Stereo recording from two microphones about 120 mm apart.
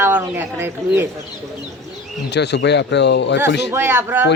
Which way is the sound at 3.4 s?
20° right (ahead or behind).